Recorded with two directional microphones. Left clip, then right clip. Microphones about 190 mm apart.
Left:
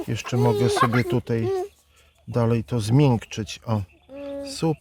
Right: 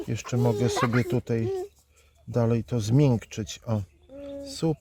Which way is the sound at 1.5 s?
30° left (ahead or behind).